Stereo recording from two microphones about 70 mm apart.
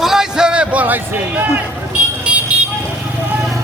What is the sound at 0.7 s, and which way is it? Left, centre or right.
Speech, right.